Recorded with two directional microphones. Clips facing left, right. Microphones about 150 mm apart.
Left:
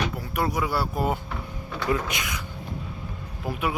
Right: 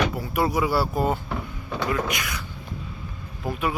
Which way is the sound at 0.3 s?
5° right (ahead or behind).